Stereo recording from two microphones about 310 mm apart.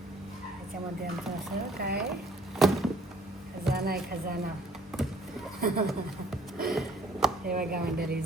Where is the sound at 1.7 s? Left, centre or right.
Right.